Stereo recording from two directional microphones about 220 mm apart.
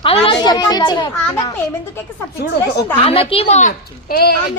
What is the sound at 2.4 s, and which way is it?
Speech, 45° left (ahead or behind).